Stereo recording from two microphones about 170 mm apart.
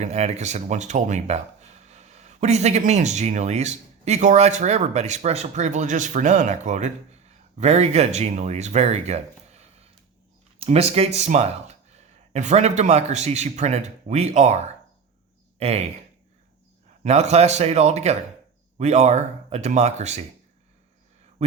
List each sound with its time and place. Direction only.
0.0 s speech: 40° right (ahead or behind)
17.0 s speech: 40° right (ahead or behind)